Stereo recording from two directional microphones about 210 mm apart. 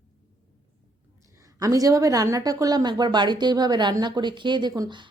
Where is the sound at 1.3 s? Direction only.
15° right (ahead or behind).